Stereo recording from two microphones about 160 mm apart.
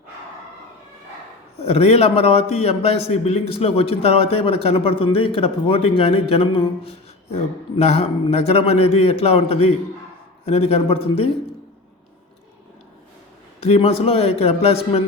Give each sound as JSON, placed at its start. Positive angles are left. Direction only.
{"t": 1.5, "sound": "a man's voice", "side_deg": 40}
{"t": 13.6, "sound": "a man's voice", "side_deg": 40}